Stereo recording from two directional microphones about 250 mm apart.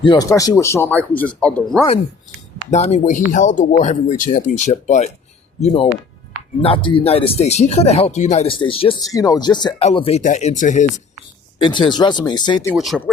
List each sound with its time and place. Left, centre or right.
0.0 s speech: centre
2.6 s speech: left
11.6 s speech: centre
12.7 s speech: centre